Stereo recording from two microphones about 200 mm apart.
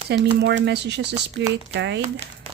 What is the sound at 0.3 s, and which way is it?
Speech, 60° right (ahead or behind).